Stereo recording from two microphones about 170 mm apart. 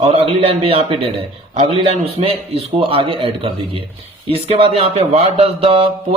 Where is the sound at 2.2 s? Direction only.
30° right (ahead or behind).